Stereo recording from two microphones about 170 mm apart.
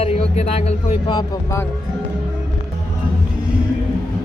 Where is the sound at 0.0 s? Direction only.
40° left (ahead or behind).